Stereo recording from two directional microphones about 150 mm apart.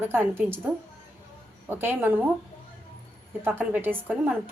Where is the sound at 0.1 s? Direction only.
15° right (ahead or behind).